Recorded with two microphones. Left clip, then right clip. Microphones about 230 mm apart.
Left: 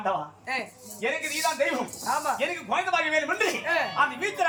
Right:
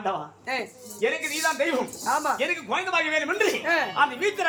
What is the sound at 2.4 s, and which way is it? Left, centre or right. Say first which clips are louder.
Speech: right 1 dB; centre.